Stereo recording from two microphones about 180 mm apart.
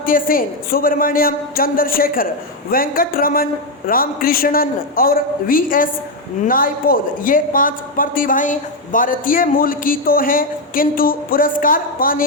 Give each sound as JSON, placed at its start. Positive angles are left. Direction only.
{"t": 0.0, "sound": "a woman's voice", "side_deg": 50}